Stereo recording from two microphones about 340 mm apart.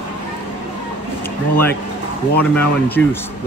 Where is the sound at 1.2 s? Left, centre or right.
Centre.